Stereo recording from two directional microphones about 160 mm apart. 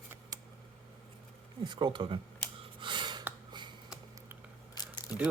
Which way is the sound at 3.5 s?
30° right (ahead or behind).